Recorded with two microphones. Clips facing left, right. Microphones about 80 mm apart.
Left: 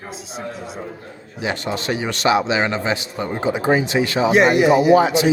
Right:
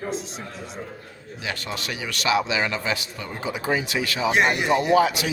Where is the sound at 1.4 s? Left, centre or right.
Left.